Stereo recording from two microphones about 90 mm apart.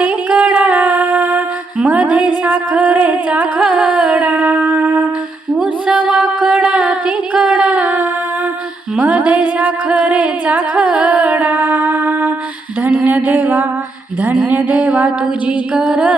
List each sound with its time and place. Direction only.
0.0 s music: 15° right (ahead or behind)
5.5 s a sound: 10° right (ahead or behind)
7.3 s singing: 10° right (ahead or behind)
9.0 s music: 15° right (ahead or behind)
12.8 s a sound: 15° right (ahead or behind)
14.5 s music: 15° right (ahead or behind)